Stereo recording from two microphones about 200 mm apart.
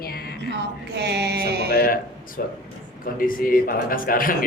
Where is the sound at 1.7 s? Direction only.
50° left (ahead or behind).